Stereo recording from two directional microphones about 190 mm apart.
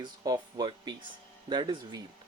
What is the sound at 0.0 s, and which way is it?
Speech, 20° right (ahead or behind).